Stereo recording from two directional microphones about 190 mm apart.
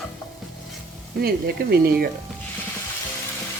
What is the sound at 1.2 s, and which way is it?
Speech, 55° right (ahead or behind).